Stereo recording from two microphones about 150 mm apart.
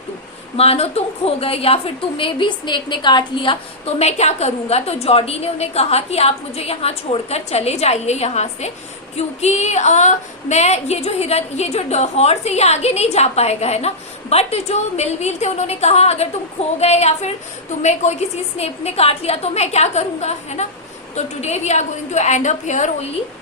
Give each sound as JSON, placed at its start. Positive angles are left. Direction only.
{"t": 0.5, "sound": "a woman's voice", "side_deg": 45}